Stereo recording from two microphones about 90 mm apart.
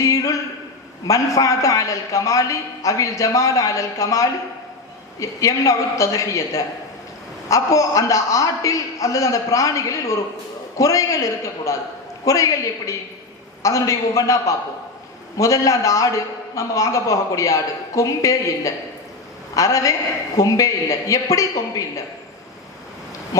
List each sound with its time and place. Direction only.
0.0 s a sound: 40° left (ahead or behind)
1.0 s a man's voice: 35° left (ahead or behind)
23.3 s a man's voice: 40° left (ahead or behind)